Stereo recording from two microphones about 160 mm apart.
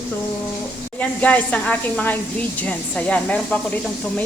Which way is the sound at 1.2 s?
10° left (ahead or behind).